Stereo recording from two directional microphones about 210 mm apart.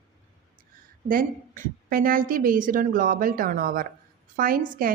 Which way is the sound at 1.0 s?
40° right (ahead or behind).